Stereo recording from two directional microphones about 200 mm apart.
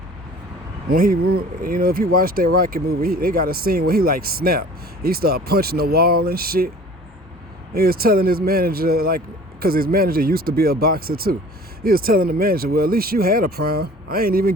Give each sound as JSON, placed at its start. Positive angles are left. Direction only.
{"t": 0.9, "sound": "speech", "side_deg": -45}
{"t": 7.7, "sound": "speech", "side_deg": -50}